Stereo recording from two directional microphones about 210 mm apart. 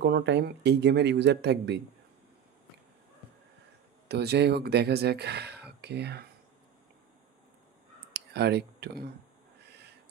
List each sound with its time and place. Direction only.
0.0 s speech: 55° right (ahead or behind)
4.1 s speech: 50° right (ahead or behind)
8.1 s speech: 50° right (ahead or behind)